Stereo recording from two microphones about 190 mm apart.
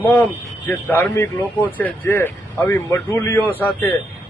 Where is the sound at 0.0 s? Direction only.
10° left (ahead or behind).